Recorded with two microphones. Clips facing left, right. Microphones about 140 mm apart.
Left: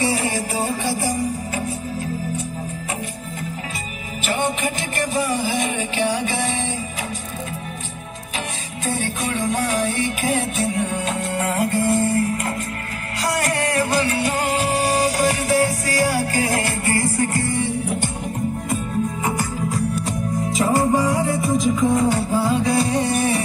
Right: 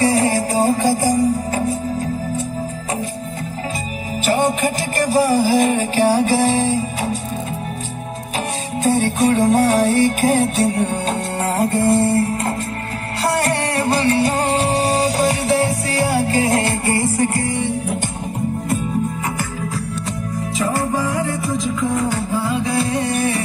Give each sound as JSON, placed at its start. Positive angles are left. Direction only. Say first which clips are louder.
{"t": 0.0, "sound": "music", "louder": "right 6 dB", "side_deg": -40}
{"t": 4.3, "sound": "music", "louder": "right 5 dB", "side_deg": -40}
{"t": 8.8, "sound": "music", "louder": "right 9 dB", "side_deg": -40}
{"t": 20.6, "sound": "music", "louder": "left 2 dB", "side_deg": 15}
{"t": 22.7, "sound": "music", "louder": "even", "side_deg": 30}